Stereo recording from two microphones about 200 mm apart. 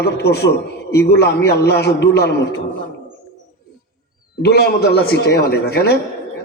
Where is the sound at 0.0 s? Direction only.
55° left (ahead or behind).